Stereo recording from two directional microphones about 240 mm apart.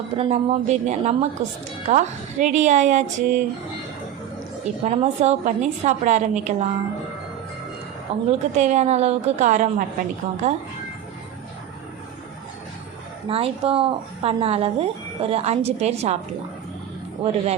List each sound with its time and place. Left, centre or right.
0.2 s speech: right
4.6 s speech: right
8.3 s speech: right
13.2 s speech: right